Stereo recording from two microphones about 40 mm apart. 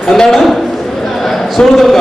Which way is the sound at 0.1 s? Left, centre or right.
Centre.